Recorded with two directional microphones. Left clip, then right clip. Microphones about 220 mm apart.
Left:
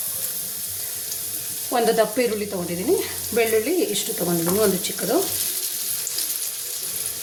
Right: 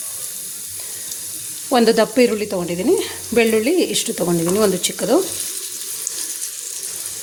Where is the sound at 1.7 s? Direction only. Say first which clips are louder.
Right 5 dB; 40° right (ahead or behind).